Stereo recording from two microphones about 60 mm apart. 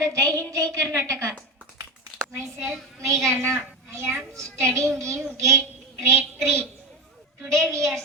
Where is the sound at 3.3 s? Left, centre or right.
Right.